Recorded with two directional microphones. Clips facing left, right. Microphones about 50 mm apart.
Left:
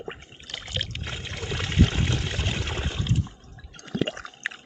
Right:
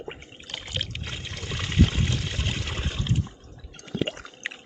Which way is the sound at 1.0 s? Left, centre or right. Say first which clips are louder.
Left 1 dB; centre.